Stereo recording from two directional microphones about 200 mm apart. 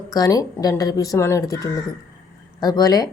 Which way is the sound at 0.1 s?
20° left (ahead or behind).